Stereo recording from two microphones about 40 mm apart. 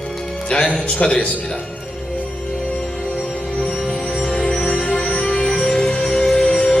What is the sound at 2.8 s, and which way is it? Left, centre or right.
Music, centre.